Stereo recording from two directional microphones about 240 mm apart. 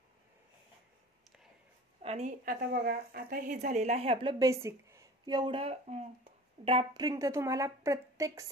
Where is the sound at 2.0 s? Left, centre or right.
Right.